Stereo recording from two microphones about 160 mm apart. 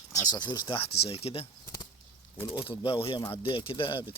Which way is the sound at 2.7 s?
35° left (ahead or behind).